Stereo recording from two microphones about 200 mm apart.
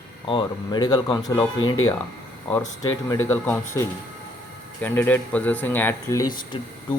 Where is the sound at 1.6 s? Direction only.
90° left.